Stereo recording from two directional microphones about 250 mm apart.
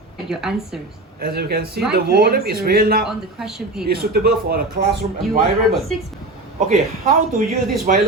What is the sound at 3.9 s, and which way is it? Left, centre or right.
Speech, right.